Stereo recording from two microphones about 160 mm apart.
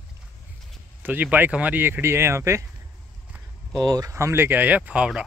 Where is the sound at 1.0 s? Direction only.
10° right (ahead or behind).